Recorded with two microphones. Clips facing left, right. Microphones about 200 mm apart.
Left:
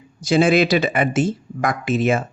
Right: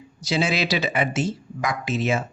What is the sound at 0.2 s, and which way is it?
Speech, 50° left (ahead or behind).